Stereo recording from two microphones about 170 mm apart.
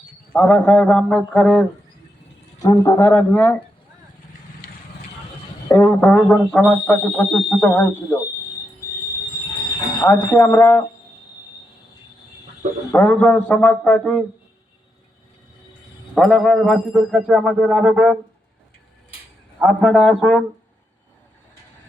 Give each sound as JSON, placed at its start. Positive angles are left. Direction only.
{"t": 0.3, "sound": "speech", "side_deg": 5}
{"t": 2.8, "sound": "speech", "side_deg": 15}
{"t": 5.6, "sound": "speech", "side_deg": 15}
{"t": 10.0, "sound": "speech", "side_deg": 20}
{"t": 12.9, "sound": "speech", "side_deg": 10}
{"t": 16.1, "sound": "speech", "side_deg": 0}
{"t": 19.6, "sound": "speech", "side_deg": 5}